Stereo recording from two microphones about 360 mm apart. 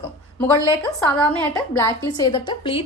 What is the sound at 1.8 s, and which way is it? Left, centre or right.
A woman's voice, centre.